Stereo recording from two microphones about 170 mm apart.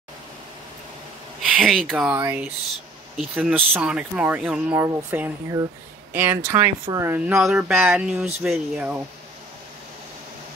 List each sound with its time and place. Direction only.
1.6 s speech: centre (ahead or behind)
2.0 s speech: 10° right (ahead or behind)
7.2 s speech: 5° right (ahead or behind)